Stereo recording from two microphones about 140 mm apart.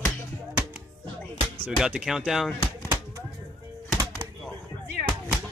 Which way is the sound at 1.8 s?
5° right (ahead or behind).